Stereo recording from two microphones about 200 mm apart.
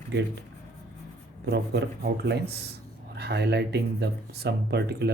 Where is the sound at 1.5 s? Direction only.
55° right (ahead or behind).